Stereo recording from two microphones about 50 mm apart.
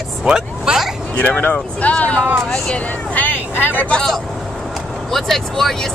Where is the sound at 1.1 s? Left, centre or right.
Left.